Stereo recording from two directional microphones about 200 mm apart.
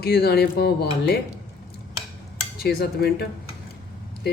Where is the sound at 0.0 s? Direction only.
50° left (ahead or behind).